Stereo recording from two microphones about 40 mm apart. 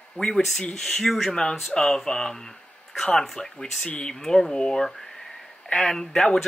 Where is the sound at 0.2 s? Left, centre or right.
Left.